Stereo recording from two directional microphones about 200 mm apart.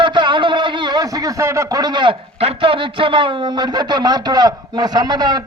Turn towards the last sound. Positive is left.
turn(degrees=-20)  # may be behind; listen again after turning